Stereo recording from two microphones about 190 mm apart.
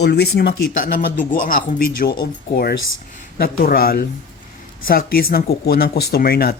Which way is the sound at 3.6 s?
50° left (ahead or behind).